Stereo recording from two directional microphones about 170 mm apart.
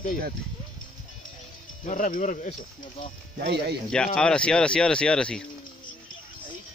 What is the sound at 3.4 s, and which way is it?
Speech, 75° right (ahead or behind).